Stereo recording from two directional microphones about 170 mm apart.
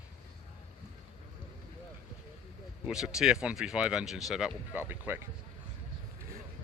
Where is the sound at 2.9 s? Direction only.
5° right (ahead or behind).